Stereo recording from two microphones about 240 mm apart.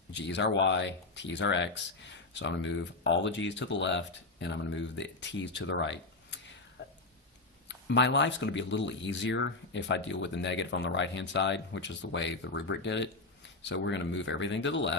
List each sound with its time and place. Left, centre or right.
0.1 s speech: left
7.7 s speech: left